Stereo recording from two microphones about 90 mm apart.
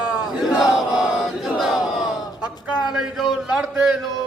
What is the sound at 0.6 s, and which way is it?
Battle cry, 5° right (ahead or behind).